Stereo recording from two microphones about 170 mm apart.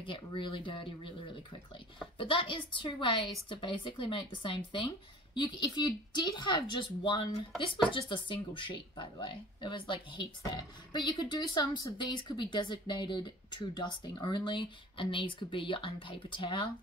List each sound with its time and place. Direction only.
0.0 s speech: 30° left (ahead or behind)